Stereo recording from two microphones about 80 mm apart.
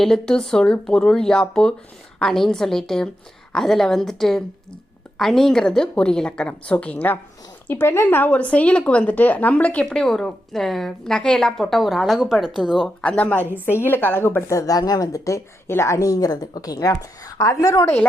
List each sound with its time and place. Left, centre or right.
0.0 s a woman's voice: centre
7.7 s a woman's voice: left; by 12.8 s centre
12.8 s speech: centre; by 17.9 s left